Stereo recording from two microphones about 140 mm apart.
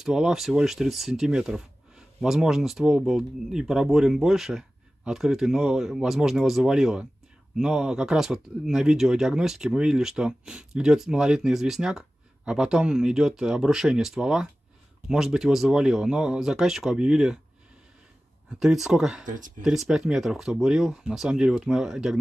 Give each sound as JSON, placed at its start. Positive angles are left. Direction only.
{"t": 0.0, "sound": "speech", "side_deg": -5}
{"t": 18.6, "sound": "speech", "side_deg": -5}
{"t": 19.2, "sound": "speech", "side_deg": -70}
{"t": 19.6, "sound": "speech", "side_deg": -5}